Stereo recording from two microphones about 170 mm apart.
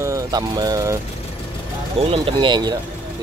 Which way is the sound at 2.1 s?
30° right (ahead or behind).